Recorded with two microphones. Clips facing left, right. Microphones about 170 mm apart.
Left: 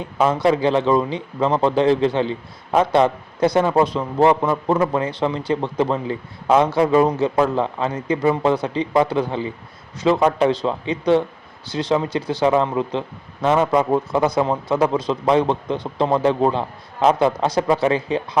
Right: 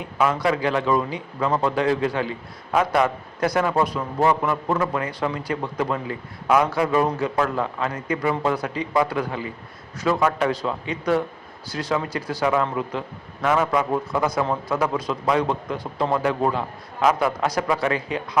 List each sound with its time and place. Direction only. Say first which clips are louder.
0.0 s a man's voice: left 4 dB; 25° left (ahead or behind)